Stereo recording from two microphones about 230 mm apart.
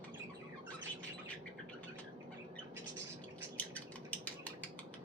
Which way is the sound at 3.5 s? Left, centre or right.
Centre.